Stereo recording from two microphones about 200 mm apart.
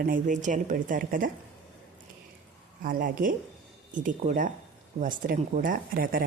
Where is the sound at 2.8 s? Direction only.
45° right (ahead or behind).